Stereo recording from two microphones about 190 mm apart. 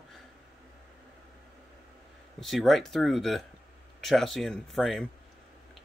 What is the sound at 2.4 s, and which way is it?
Speech, centre (ahead or behind).